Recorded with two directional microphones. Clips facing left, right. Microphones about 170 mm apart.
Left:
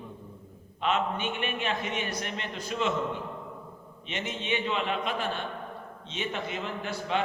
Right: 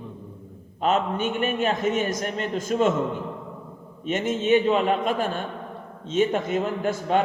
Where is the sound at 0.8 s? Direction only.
40° right (ahead or behind).